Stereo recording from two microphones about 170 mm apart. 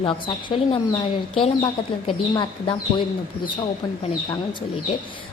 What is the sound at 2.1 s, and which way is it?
Speech, 30° left (ahead or behind).